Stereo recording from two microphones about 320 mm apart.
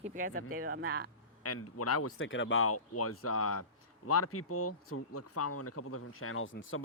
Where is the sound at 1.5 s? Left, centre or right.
Left.